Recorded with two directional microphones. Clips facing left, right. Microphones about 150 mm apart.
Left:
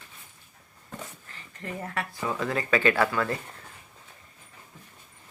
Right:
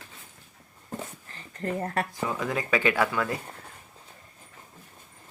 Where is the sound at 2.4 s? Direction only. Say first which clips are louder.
Left 2 dB; 15° right (ahead or behind).